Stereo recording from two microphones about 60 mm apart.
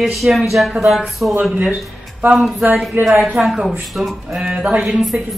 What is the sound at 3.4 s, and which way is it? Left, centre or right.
Speech, centre.